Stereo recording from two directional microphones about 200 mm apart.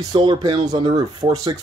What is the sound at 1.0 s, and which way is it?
Speech, 20° right (ahead or behind).